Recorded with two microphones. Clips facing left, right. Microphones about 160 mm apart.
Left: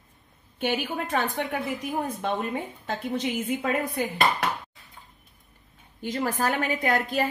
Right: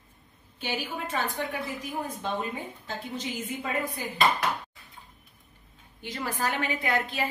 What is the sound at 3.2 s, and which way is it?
Speech, 65° left (ahead or behind).